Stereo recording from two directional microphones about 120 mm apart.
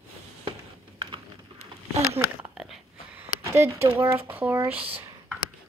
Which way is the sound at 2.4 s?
5° right (ahead or behind).